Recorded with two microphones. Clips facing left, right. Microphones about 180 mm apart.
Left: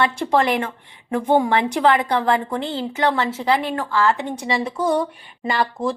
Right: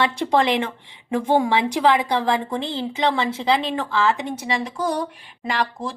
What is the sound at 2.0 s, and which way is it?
Speech, 10° right (ahead or behind).